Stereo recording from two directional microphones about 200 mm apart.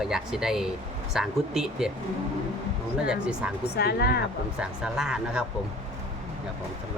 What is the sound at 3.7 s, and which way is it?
Speech, 55° left (ahead or behind).